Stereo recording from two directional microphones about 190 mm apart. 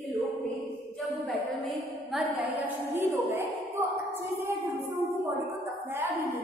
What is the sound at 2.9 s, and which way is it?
Speech, 15° right (ahead or behind).